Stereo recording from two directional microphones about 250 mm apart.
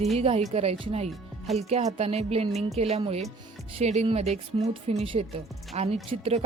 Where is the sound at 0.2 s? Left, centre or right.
Right.